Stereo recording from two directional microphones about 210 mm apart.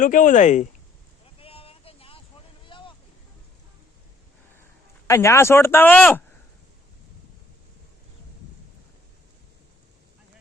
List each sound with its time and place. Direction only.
0.0 s speech: 40° left (ahead or behind)
1.4 s vehicle: 25° left (ahead or behind)
2.6 s a sound: 25° left (ahead or behind)
5.0 s speech: 15° left (ahead or behind)